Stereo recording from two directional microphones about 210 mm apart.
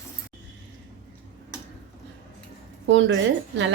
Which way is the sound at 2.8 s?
60° right (ahead or behind).